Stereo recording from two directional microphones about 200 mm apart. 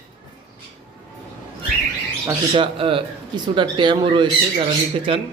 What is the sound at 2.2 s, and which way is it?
Speech, 25° right (ahead or behind).